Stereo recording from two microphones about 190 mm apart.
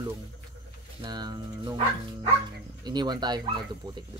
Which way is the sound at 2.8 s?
20° right (ahead or behind).